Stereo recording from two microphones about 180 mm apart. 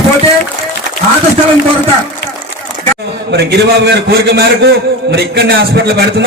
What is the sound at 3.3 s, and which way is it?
A man's voice, 65° right (ahead or behind).